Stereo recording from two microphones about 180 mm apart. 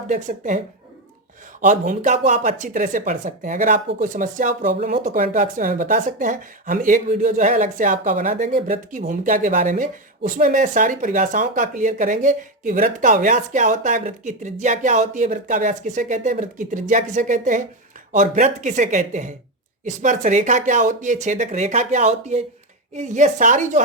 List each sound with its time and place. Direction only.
0.1 s speech: 45° right (ahead or behind)
1.6 s speech: 45° right (ahead or behind)